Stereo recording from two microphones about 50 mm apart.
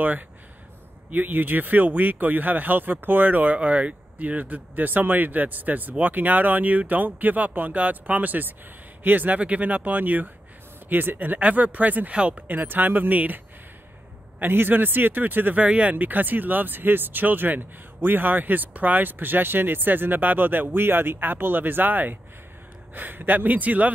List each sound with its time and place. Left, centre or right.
1.1 s speech: right
12.1 s speech: right
12.4 s speech: right
14.4 s speech: right